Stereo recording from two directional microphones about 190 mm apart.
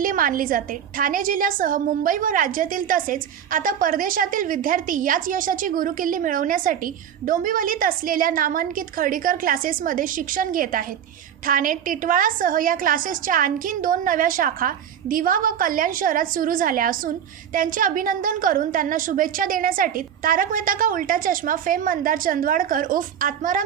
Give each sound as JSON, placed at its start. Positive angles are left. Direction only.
{"t": 0.0, "sound": "a woman's voice", "side_deg": -45}